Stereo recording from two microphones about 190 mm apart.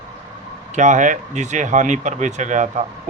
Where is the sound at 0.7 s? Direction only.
40° right (ahead or behind).